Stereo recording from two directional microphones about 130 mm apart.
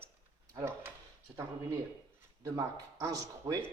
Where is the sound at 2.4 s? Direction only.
30° right (ahead or behind).